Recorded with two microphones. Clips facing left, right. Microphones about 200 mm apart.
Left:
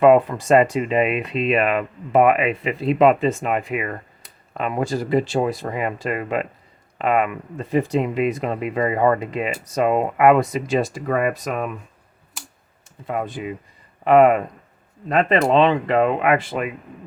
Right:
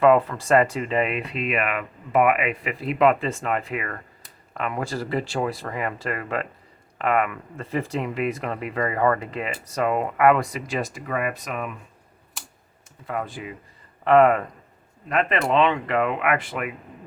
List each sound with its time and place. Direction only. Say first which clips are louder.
0.0 s speech: left 4 dB; 20° left (ahead or behind); by 11.7 s 40° left (ahead or behind)
13.1 s speech: left 4 dB; 20° left (ahead or behind)
15.1 s speech: left 5 dB; 30° left (ahead or behind)